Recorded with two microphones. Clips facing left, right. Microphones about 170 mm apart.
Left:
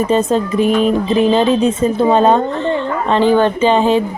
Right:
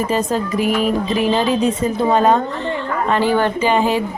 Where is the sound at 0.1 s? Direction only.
25° left (ahead or behind).